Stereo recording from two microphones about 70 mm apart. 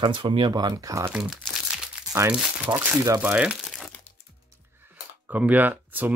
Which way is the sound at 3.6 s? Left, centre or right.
Centre.